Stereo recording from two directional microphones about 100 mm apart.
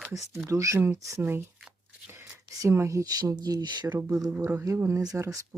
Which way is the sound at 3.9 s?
20° right (ahead or behind).